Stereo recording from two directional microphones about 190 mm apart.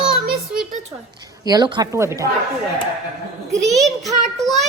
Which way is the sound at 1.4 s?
20° right (ahead or behind).